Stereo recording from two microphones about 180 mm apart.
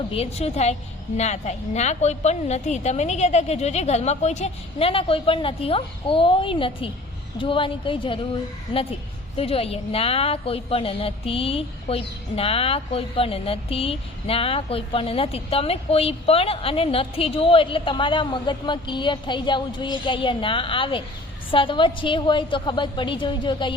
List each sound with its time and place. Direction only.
0.1 s a woman's voice: 35° left (ahead or behind)